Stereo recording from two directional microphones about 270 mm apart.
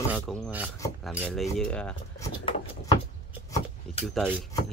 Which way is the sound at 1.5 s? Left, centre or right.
Centre.